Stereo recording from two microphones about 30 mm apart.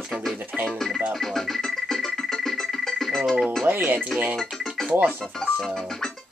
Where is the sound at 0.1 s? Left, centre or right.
Centre.